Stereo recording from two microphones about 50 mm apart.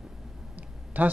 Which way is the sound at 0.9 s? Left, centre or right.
Right.